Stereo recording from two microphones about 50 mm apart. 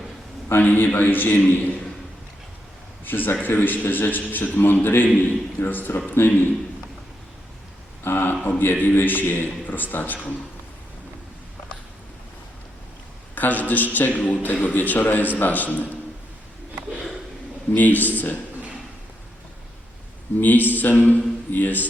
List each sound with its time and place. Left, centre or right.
0.6 s a man's voice: left
3.0 s a man's voice: left
8.0 s a man's voice: left
13.3 s a man's voice: left
17.7 s a man's voice: left
20.4 s a man's voice: left